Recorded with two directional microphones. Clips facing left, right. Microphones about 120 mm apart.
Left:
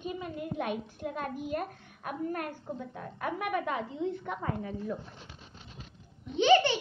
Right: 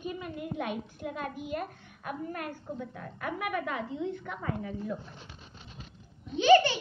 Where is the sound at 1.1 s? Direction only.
40° left (ahead or behind).